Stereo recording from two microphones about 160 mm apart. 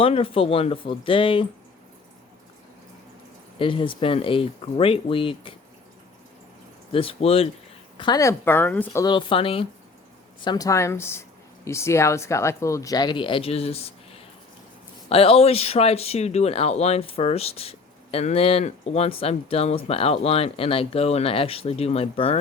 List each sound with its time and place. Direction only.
0.0 s speech: 35° left (ahead or behind)
3.6 s speech: 30° left (ahead or behind)
6.9 s speech: 35° left (ahead or behind)
7.9 s speech: 25° left (ahead or behind)
9.0 s speech: 30° left (ahead or behind)
15.1 s speech: 35° left (ahead or behind)